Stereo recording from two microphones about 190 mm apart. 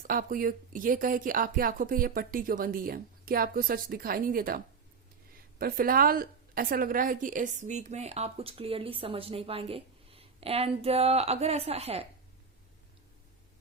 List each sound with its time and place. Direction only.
0.0 s a woman's voice: 50° right (ahead or behind); by 12.0 s 30° right (ahead or behind)